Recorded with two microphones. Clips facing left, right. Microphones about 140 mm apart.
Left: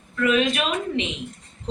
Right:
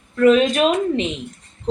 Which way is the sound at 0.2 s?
40° right (ahead or behind).